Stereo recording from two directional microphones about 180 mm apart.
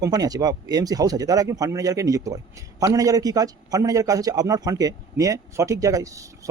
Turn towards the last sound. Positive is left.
turn(degrees=-20)  # may be behind; listen again after turning